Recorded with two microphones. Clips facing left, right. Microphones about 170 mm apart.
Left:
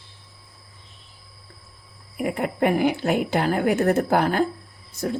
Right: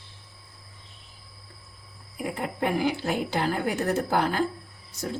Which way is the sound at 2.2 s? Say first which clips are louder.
Left 6 dB; 65° left (ahead or behind).